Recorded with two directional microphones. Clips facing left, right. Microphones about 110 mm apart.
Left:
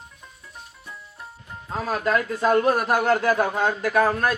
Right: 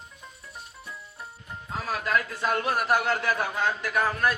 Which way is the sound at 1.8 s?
40° left (ahead or behind).